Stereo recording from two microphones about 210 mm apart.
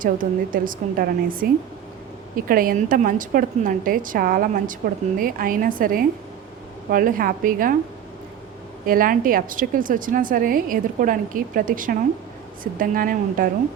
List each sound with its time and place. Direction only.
0.0 s a woman's voice: 40° right (ahead or behind)
8.9 s a woman's voice: 40° right (ahead or behind)